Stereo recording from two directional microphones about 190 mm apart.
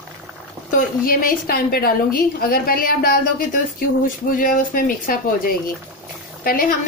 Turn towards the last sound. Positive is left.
turn(degrees=50)  # may be behind; listen again after turning